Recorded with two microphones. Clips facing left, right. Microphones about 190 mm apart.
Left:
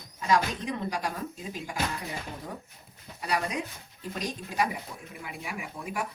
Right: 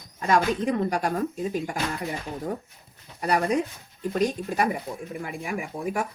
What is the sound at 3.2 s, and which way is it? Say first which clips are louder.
Speech: right 7 dB; 45° right (ahead or behind).